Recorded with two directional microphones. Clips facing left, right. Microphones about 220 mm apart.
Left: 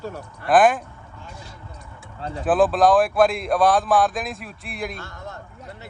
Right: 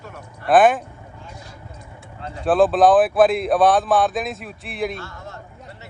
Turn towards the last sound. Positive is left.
turn(degrees=0)  # may be behind; listen again after turning